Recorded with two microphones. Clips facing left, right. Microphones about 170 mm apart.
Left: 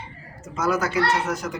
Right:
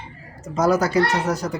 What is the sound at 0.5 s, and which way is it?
A child's voice, 40° right (ahead or behind).